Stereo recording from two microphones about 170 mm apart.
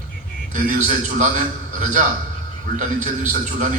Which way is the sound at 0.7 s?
45° right (ahead or behind).